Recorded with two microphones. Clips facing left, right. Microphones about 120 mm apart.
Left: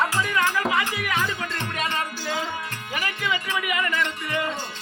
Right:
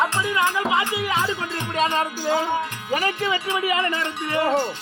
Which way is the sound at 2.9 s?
35° right (ahead or behind).